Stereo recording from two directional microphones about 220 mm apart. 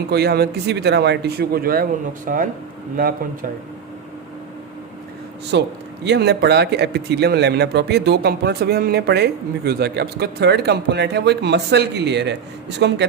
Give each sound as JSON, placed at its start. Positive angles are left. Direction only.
{"t": 0.1, "sound": "speech", "side_deg": -45}
{"t": 5.5, "sound": "speech", "side_deg": -50}